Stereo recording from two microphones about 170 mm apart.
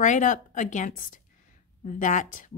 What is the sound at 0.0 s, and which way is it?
Speech, 50° left (ahead or behind).